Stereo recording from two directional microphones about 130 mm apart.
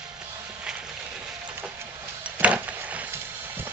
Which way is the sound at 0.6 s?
5° right (ahead or behind).